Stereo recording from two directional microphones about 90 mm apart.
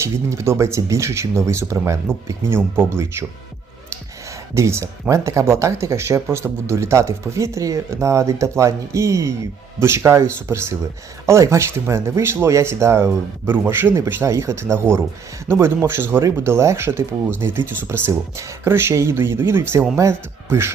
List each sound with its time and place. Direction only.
0.0 s speech: 30° right (ahead or behind)
4.5 s speech: 30° right (ahead or behind)